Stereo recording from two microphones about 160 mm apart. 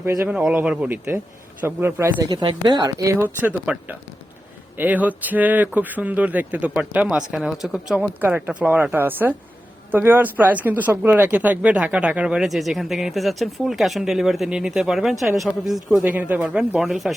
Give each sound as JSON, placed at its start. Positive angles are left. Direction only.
{"t": 0.0, "sound": "speech", "side_deg": -15}
{"t": 0.3, "sound": "speech", "side_deg": -5}
{"t": 2.3, "sound": "speech", "side_deg": -25}